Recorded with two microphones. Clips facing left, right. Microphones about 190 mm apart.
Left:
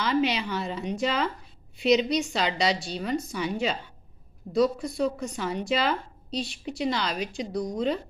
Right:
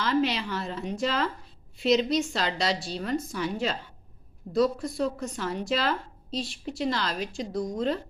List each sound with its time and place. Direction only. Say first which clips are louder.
0.0 s a woman's voice: left 1 dB; centre (ahead or behind)